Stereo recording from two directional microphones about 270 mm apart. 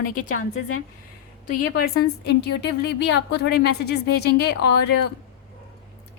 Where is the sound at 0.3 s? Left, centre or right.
Left.